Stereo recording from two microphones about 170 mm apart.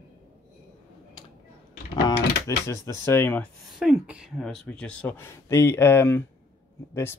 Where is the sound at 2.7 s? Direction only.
15° left (ahead or behind).